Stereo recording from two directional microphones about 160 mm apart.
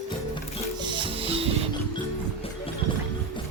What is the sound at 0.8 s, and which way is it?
Music, 30° right (ahead or behind).